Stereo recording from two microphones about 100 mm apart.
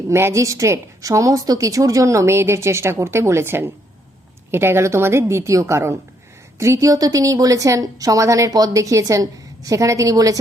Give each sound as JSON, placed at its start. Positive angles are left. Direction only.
{"t": 0.1, "sound": "a woman's voice", "side_deg": -25}